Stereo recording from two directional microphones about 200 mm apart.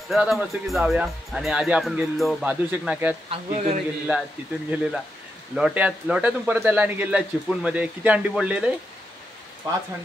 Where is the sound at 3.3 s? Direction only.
30° right (ahead or behind).